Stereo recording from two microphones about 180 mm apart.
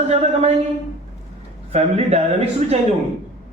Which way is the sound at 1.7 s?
35° right (ahead or behind).